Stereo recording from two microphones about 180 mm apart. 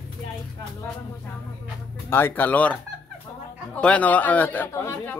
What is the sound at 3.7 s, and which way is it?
Speech, 5° left (ahead or behind).